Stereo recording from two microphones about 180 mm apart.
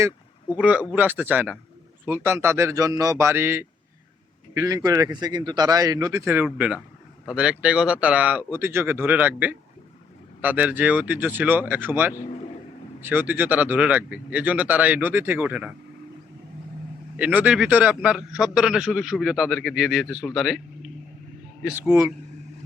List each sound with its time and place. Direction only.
0.5 s speech: 10° right (ahead or behind)
17.2 s speech: 10° right (ahead or behind)
21.8 s speech: 15° right (ahead or behind)